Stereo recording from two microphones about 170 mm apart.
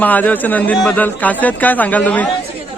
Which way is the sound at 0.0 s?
10° left (ahead or behind).